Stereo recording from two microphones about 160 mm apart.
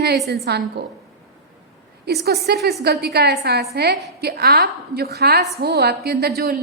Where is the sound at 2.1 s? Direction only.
90° right.